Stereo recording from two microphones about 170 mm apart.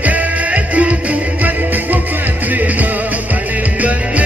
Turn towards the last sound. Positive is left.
turn(degrees=-10)  # may be behind; listen again after turning